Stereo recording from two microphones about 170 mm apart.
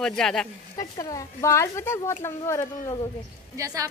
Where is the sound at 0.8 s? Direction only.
20° left (ahead or behind).